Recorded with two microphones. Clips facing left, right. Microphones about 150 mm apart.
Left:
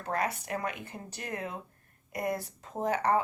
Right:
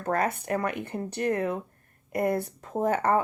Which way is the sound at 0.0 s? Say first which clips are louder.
Right 5 dB; 50° right (ahead or behind).